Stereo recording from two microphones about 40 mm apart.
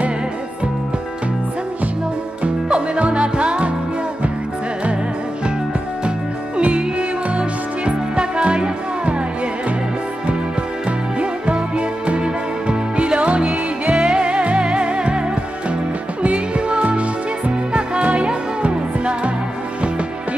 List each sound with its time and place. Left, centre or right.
2.4 s music: right
6.0 s music: right
11.1 s music: right